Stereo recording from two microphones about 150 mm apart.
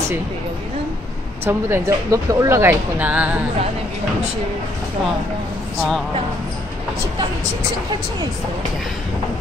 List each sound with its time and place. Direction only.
1.4 s speech: 15° right (ahead or behind)